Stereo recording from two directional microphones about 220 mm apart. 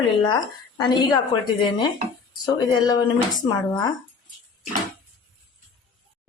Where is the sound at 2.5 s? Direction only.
20° left (ahead or behind).